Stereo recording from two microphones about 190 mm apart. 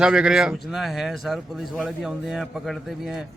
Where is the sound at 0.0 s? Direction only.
5° right (ahead or behind).